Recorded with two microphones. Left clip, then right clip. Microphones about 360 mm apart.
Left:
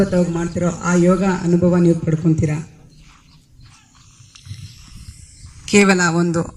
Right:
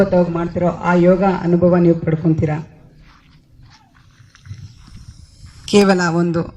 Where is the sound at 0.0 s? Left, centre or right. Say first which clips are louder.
Right 4 dB; right.